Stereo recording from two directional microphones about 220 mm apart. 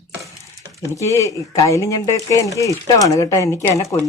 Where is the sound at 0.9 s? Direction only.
15° left (ahead or behind).